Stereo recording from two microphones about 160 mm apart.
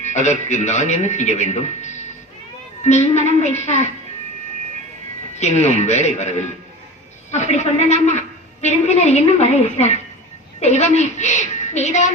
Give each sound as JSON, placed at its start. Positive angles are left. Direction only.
{"t": 0.0, "sound": "a man's voice", "side_deg": 45}
{"t": 5.4, "sound": "a man's voice", "side_deg": 45}